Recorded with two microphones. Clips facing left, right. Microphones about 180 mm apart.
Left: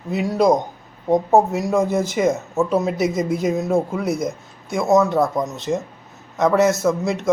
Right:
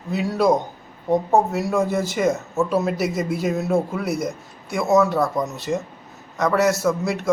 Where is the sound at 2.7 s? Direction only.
Centre (ahead or behind).